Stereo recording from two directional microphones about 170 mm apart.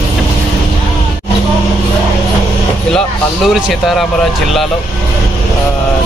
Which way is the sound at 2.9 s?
Centre (ahead or behind).